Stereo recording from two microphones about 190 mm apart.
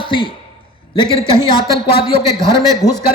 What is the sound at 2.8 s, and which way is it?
Speech, 20° left (ahead or behind).